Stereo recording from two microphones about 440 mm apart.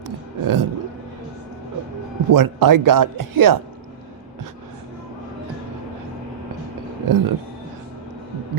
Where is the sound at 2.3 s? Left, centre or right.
Right.